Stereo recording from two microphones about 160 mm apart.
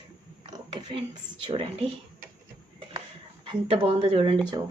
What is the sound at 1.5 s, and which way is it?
Speech, 35° right (ahead or behind).